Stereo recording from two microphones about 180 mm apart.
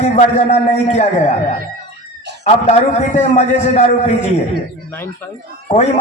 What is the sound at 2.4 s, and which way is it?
A man's voice, 35° left (ahead or behind).